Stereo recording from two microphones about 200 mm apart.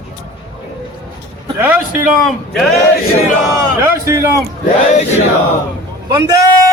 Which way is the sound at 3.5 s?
15° right (ahead or behind).